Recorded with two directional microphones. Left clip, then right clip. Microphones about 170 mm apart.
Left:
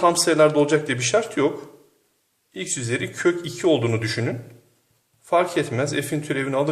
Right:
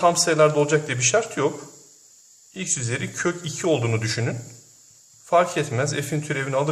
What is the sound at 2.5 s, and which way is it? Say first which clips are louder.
A man's voice: left 1 dB; 5° left (ahead or behind).